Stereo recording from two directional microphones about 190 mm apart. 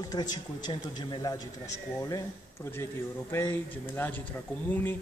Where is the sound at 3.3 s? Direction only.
15° left (ahead or behind).